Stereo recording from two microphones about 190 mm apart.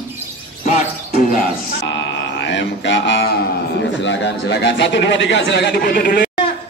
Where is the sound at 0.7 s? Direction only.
40° left (ahead or behind).